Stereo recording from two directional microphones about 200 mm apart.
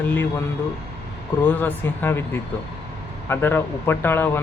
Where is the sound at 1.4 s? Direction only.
10° left (ahead or behind).